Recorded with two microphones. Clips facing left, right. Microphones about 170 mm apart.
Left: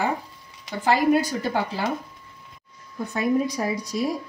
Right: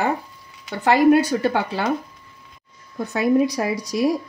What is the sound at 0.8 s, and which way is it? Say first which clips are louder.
A woman's voice: right 5 dB; 70° right (ahead or behind).